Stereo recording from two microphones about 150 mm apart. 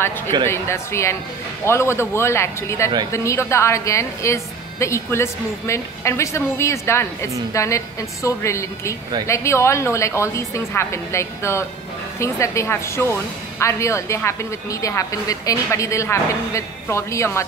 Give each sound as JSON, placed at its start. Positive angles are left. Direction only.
{"t": 0.5, "sound": "a man's voice", "side_deg": 20}